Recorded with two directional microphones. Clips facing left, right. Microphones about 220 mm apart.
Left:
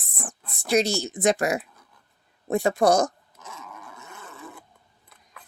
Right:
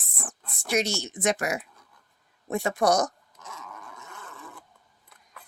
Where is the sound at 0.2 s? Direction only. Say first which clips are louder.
Left 3 dB; 20° left (ahead or behind).